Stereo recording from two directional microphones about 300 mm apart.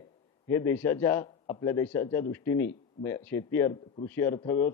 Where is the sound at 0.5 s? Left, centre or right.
Centre.